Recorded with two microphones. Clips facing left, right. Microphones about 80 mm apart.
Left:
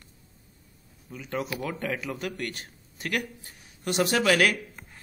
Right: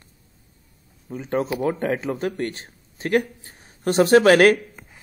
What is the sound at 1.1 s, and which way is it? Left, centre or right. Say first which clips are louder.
A man's voice: right 8 dB; right.